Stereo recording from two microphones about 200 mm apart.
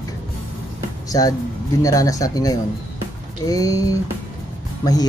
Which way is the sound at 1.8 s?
15° left (ahead or behind).